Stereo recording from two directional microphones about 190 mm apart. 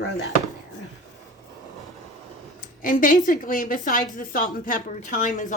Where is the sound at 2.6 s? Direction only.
45° left (ahead or behind).